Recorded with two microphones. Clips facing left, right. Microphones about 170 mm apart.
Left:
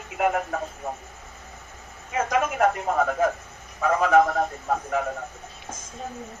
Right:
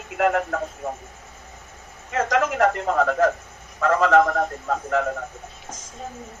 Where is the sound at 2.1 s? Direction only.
80° right.